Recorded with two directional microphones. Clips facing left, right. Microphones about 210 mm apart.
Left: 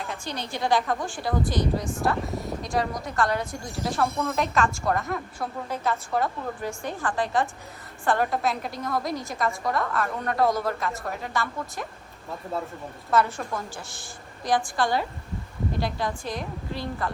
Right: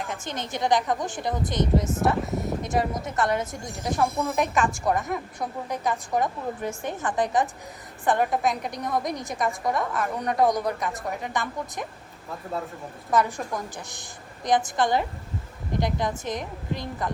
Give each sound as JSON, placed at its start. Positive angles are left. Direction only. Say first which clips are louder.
{"t": 0.1, "sound": "a woman's voice", "louder": "right 1 dB", "side_deg": -20}
{"t": 13.1, "sound": "a woman's voice", "louder": "even", "side_deg": -15}